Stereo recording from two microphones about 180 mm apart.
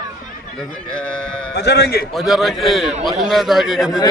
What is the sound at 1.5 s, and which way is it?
Speech, 65° left (ahead or behind).